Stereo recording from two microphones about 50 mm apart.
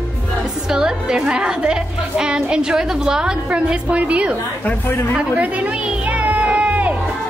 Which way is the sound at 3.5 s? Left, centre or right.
Right.